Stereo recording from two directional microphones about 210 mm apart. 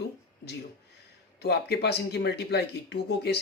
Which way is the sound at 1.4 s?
50° left (ahead or behind).